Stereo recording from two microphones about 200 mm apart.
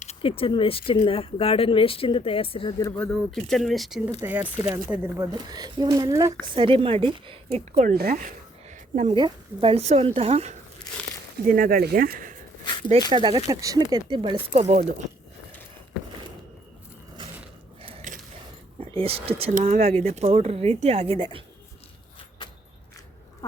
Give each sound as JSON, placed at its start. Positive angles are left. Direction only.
{"t": 0.0, "sound": "speech", "side_deg": 30}
{"t": 3.0, "sound": "a woman's voice", "side_deg": 5}
{"t": 7.8, "sound": "speech", "side_deg": -50}
{"t": 8.7, "sound": "a sound", "side_deg": -35}
{"t": 9.1, "sound": "a woman's voice", "side_deg": -25}
{"t": 11.4, "sound": "speech", "side_deg": -45}
{"t": 13.1, "sound": "a woman's voice", "side_deg": -20}
{"t": 17.8, "sound": "biting", "side_deg": -30}
{"t": 18.8, "sound": "speech", "side_deg": -30}